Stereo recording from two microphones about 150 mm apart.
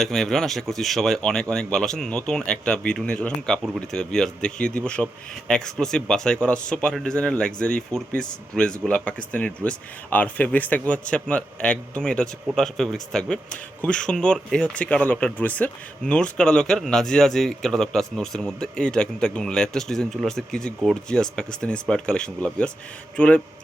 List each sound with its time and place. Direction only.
0.0 s a man's voice: 5° left (ahead or behind)